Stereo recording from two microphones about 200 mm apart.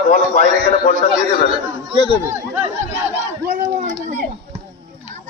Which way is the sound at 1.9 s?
25° left (ahead or behind).